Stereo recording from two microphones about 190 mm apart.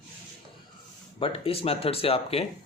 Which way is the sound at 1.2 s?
30° left (ahead or behind).